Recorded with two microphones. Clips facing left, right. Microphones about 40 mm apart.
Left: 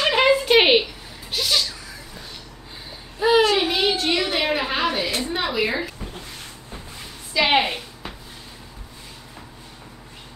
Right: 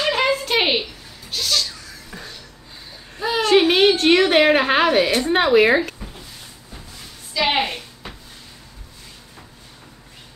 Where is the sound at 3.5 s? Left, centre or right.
Right.